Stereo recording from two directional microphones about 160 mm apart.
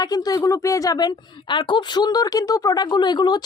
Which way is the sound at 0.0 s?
25° left (ahead or behind).